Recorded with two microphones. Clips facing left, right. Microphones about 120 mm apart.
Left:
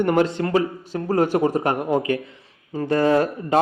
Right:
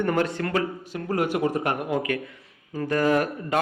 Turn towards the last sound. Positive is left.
turn(degrees=30)  # may be behind; listen again after turning